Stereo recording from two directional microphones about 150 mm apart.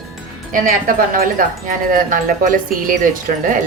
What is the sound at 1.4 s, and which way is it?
Speech, 65° right (ahead or behind).